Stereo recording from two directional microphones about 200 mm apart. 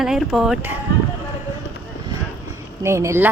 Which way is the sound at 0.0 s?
Centre (ahead or behind).